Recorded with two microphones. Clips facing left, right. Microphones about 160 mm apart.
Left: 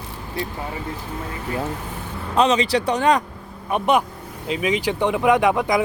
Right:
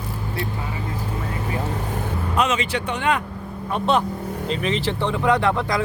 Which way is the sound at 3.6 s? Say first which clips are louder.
Left 2 dB; 15° left (ahead or behind).